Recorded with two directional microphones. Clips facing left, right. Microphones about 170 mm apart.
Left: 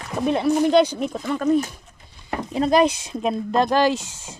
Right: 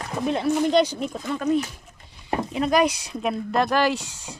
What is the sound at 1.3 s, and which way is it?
Speech, 45° left (ahead or behind).